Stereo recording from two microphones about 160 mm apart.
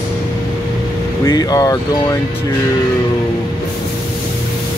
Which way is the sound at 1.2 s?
25° left (ahead or behind).